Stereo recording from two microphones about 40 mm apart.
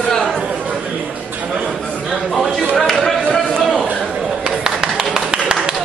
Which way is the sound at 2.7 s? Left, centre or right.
Centre.